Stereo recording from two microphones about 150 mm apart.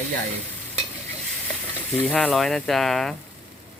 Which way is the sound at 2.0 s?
5° left (ahead or behind).